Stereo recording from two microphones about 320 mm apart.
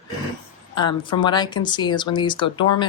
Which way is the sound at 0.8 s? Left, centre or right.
Centre.